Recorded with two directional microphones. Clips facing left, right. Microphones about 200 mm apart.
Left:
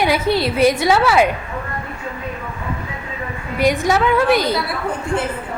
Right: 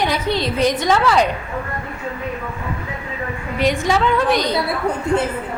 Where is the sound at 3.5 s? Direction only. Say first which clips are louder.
Left 2 dB; 10° left (ahead or behind).